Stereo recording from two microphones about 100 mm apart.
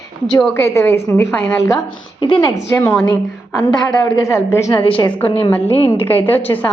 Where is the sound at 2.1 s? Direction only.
55° left (ahead or behind).